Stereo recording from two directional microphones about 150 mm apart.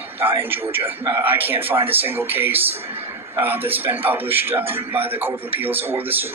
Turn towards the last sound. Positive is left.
turn(degrees=-15)  # may be behind; listen again after turning